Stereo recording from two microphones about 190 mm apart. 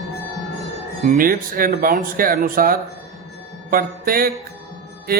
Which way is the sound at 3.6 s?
50° right (ahead or behind).